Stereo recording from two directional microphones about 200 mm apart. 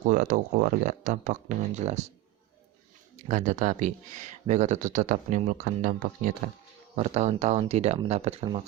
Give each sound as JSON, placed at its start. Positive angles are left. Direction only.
{"t": 0.0, "sound": "speech", "side_deg": -40}
{"t": 3.2, "sound": "speech", "side_deg": -35}